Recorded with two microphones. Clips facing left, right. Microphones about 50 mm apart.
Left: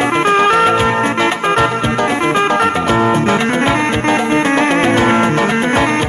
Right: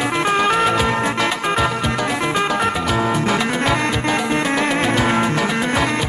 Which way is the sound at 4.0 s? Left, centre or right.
Left.